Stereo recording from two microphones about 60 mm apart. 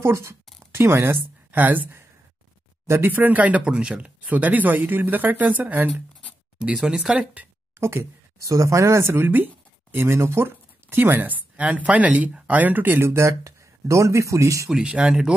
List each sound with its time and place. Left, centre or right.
0.0 s a woman's voice: right
3.1 s speech: right
6.8 s speech: centre
7.8 s speech: right
8.5 s speech: right
10.5 s speech: right
13.3 s speech: right
14.8 s speech: centre